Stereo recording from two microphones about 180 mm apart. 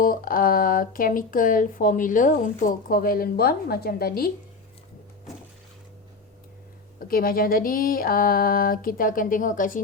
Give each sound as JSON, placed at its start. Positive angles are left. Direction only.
{"t": 0.0, "sound": "speech", "side_deg": 50}
{"t": 7.0, "sound": "speech", "side_deg": 55}